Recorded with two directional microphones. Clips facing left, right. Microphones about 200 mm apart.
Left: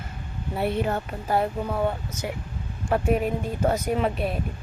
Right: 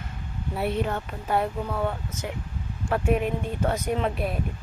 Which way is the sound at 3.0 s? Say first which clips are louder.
Even; 40° left (ahead or behind).